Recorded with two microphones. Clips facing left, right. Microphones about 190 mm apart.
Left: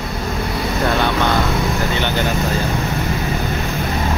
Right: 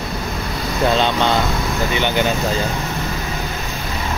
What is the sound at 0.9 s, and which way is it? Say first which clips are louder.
Speech: even; 20° right (ahead or behind).